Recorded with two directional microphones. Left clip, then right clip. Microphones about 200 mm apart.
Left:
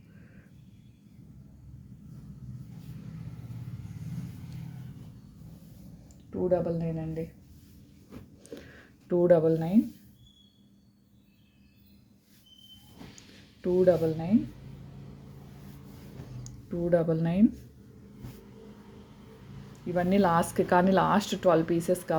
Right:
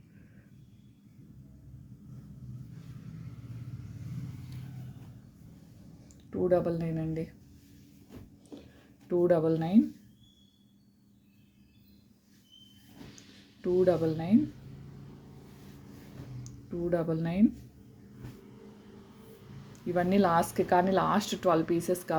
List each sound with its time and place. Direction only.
6.3 s speech: 15° right (ahead or behind)
9.0 s a woman's voice: 5° left (ahead or behind)
13.6 s a woman's voice: centre (ahead or behind)
16.4 s speech: 10° left (ahead or behind)
19.9 s a woman's voice: 5° right (ahead or behind)